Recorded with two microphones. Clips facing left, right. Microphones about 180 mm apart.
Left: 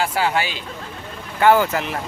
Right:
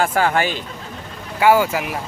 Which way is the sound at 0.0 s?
50° right (ahead or behind).